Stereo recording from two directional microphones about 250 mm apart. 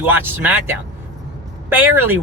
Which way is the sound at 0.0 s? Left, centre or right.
Centre.